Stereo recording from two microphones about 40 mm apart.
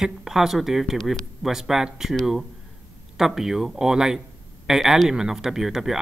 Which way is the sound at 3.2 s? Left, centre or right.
Centre.